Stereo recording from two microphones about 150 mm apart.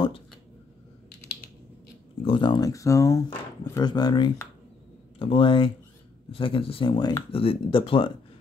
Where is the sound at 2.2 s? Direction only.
35° left (ahead or behind).